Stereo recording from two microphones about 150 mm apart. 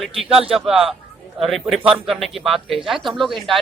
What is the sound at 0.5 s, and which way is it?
Speech, 5° right (ahead or behind).